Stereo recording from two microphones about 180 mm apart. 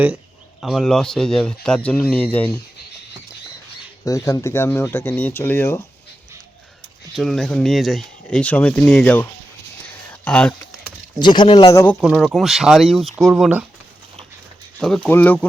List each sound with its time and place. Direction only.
0.6 s speech: centre (ahead or behind)
4.0 s speech: 20° left (ahead or behind)
7.2 s speech: centre (ahead or behind)
10.1 s a sound: 5° left (ahead or behind)
11.2 s speech: 25° left (ahead or behind)
11.9 s speech: centre (ahead or behind)
14.8 s speech: 5° left (ahead or behind)